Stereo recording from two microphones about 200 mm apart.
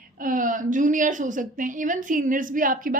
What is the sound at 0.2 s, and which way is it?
A woman's voice, 40° right (ahead or behind).